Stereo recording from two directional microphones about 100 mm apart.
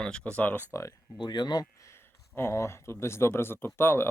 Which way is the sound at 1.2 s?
45° left (ahead or behind).